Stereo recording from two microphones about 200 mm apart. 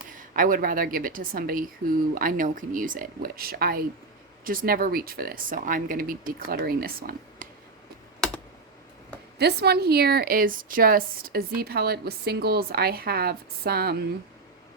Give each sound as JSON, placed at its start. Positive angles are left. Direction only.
{"t": 0.1, "sound": "a woman's voice", "side_deg": -40}
{"t": 9.4, "sound": "a woman's voice", "side_deg": -55}